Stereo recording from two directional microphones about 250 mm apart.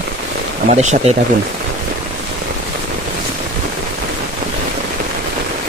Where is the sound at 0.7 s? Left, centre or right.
Right.